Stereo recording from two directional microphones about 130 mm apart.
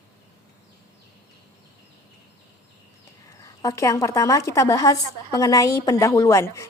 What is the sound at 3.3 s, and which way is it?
Speech, 25° left (ahead or behind).